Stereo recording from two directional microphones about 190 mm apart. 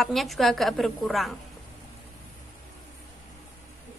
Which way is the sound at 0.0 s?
Centre (ahead or behind).